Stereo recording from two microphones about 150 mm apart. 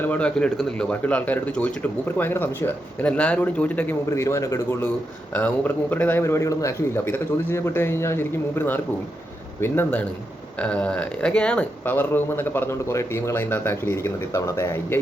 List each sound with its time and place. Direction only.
0.0 s speech: 10° left (ahead or behind)